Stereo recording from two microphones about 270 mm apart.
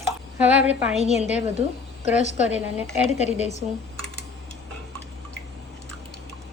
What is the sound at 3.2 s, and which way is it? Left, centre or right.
Speech, left.